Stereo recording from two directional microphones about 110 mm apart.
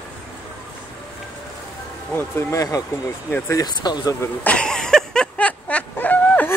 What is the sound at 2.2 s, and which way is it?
Speech, 25° left (ahead or behind).